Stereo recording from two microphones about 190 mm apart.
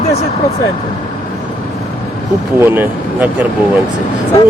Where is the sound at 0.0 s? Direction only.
35° left (ahead or behind).